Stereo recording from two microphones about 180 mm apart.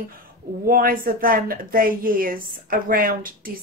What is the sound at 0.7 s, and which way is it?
A woman's voice, 55° right (ahead or behind).